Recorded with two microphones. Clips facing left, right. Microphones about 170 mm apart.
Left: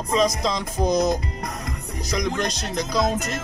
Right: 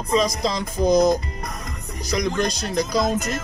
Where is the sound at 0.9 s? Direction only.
35° right (ahead or behind).